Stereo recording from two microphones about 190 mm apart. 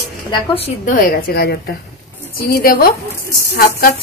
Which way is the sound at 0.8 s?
45° left (ahead or behind).